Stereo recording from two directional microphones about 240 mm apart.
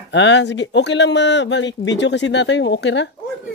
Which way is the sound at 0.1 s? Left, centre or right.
Left.